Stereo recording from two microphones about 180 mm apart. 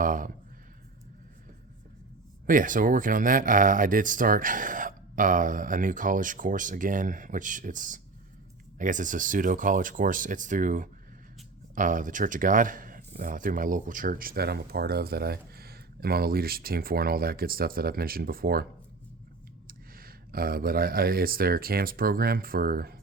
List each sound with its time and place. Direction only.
0.0 s a sound: 50° right (ahead or behind)
2.5 s speech: 50° right (ahead or behind)
19.6 s speech: 55° right (ahead or behind)